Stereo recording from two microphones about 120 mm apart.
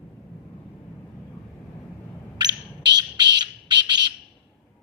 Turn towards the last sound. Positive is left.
turn(degrees=-40)  # may be behind; listen again after turning